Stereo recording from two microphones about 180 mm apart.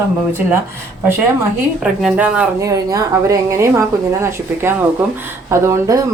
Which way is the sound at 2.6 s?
20° right (ahead or behind).